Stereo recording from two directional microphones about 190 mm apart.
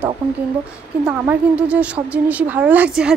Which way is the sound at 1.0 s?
5° right (ahead or behind).